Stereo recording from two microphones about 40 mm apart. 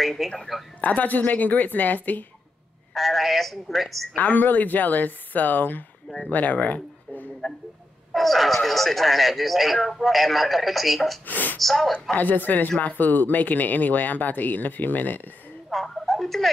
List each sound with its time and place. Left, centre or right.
0.2 s speech: centre
0.7 s speech: left
2.9 s speech: centre
4.1 s speech: left
6.1 s speech: left
8.1 s speech: centre
11.2 s speech: left
11.5 s speech: centre
12.2 s speech: left
15.7 s speech: centre